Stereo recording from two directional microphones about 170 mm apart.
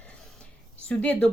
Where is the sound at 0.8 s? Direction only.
5° left (ahead or behind).